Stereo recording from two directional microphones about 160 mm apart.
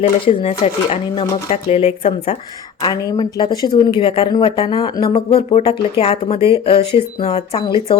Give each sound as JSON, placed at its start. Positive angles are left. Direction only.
{"t": 0.3, "sound": "speech", "side_deg": 40}
{"t": 2.8, "sound": "speech", "side_deg": 25}